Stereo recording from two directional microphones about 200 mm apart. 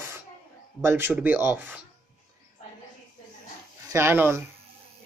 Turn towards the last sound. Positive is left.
turn(degrees=-10)  # may be behind; listen again after turning